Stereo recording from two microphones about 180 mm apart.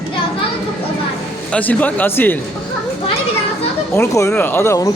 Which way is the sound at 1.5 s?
10° left (ahead or behind).